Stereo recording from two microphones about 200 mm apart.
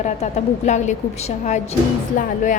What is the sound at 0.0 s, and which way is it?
A woman's voice, 35° left (ahead or behind).